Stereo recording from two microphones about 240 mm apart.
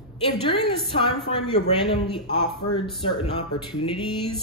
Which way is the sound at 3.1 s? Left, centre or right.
Centre.